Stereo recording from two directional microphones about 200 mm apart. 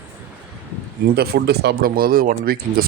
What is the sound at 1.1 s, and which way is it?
Speech, 55° right (ahead or behind).